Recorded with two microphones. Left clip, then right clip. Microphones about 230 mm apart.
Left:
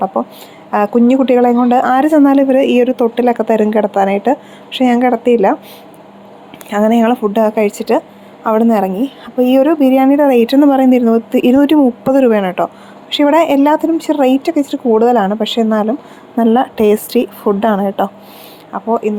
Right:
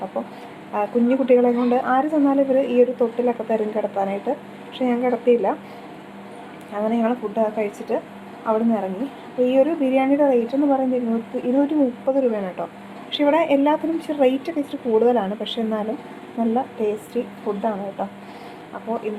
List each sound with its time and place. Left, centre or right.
0.1 s a woman's voice: left
6.7 s a woman's voice: left
18.7 s a woman's voice: left